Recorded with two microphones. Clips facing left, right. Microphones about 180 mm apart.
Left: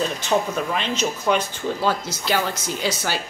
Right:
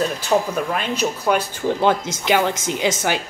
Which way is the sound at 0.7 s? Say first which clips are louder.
Right 2 dB; 10° right (ahead or behind).